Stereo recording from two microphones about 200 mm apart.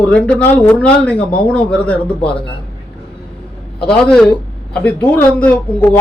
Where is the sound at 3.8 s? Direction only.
5° left (ahead or behind).